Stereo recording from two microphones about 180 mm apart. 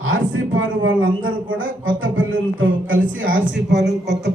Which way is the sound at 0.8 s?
90° right.